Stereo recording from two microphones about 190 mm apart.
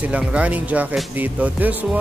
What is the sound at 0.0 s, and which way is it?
Speech, 5° right (ahead or behind).